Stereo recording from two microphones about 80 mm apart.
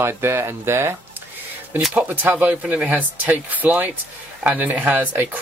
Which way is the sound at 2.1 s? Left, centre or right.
Right.